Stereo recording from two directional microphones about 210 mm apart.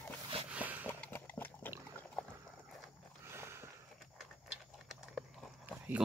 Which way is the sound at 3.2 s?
10° right (ahead or behind).